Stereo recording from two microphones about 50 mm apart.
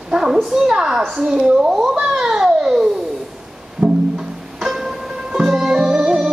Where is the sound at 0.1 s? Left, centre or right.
Centre.